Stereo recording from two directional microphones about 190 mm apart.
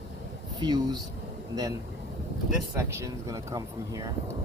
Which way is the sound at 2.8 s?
15° right (ahead or behind).